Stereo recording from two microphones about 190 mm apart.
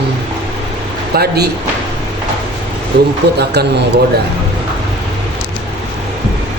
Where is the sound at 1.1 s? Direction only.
60° right (ahead or behind).